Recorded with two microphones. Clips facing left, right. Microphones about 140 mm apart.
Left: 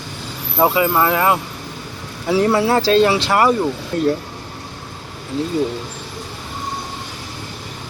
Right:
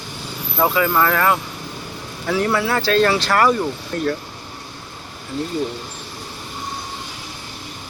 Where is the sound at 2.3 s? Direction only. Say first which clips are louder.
Left 4 dB; 30° left (ahead or behind).